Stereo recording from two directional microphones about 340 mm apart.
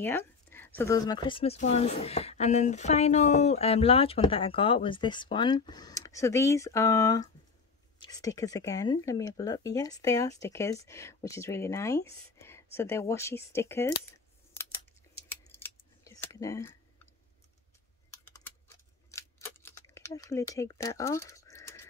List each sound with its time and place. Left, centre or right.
0.0 s speech: centre
15.5 s scissors: centre
19.0 s a sound: centre